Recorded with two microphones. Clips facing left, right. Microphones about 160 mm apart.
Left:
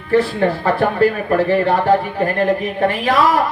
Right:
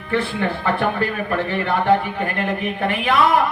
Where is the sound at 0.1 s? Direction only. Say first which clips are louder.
Left 6 dB; 35° left (ahead or behind).